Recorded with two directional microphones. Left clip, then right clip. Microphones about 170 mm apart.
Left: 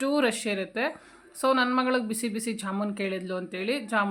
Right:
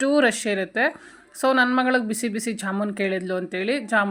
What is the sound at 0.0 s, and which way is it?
A woman's voice, 25° right (ahead or behind).